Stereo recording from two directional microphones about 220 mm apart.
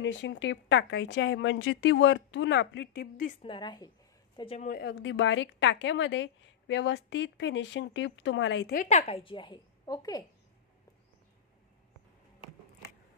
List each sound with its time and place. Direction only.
0.0 s a woman's voice: 55° left (ahead or behind)
3.4 s a woman's voice: 20° left (ahead or behind)
4.6 s a woman's voice: 50° left (ahead or behind)
8.7 s a woman's voice: 30° left (ahead or behind)